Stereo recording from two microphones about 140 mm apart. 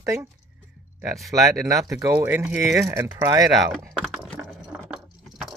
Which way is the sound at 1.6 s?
25° right (ahead or behind).